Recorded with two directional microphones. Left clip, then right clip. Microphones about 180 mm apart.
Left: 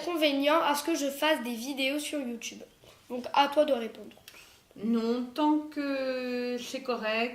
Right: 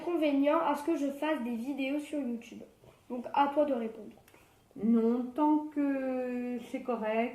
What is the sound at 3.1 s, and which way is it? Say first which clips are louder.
Speech: left 3 dB; 20° left (ahead or behind).